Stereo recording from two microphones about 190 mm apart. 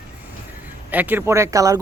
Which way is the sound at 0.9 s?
10° right (ahead or behind).